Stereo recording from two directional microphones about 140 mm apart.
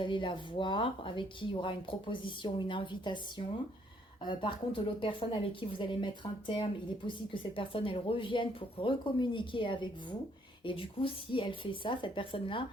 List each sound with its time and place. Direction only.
0.0 s a woman's voice: 35° left (ahead or behind)